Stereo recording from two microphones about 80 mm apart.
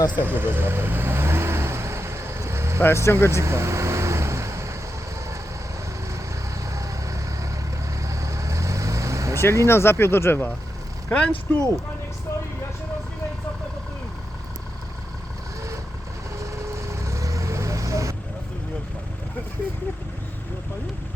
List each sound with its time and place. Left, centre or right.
0.1 s vehicle: right
2.8 s speech: left
3.2 s vehicle: right
6.7 s vehicle: right
9.6 s speech: left
11.1 s speech: centre
16.4 s vehicle: right